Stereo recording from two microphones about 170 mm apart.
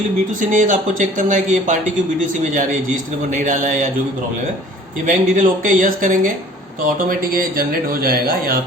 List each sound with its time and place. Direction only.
0.3 s speech: 50° right (ahead or behind)
5.0 s speech: 50° right (ahead or behind)